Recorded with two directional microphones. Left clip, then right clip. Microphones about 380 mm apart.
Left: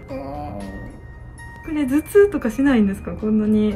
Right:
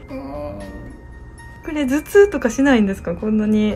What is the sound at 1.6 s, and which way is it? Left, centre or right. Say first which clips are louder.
Speech: right 1 dB; centre.